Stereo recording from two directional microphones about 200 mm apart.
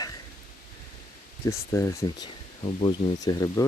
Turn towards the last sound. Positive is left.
turn(degrees=20)  # may be behind; listen again after turning